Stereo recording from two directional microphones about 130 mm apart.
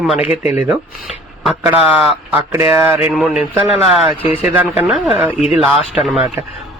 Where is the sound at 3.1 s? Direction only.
Centre (ahead or behind).